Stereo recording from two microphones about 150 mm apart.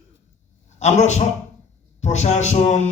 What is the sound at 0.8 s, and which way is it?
A man's voice, 50° left (ahead or behind).